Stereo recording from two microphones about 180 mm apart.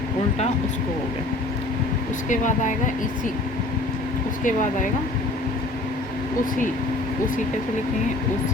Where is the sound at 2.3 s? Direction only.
45° left (ahead or behind).